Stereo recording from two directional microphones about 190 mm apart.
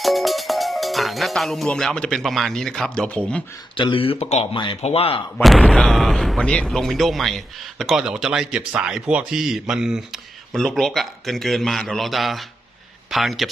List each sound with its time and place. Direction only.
0.0 s speech: centre (ahead or behind)
3.8 s speech: 25° left (ahead or behind)
5.4 s speech: centre (ahead or behind)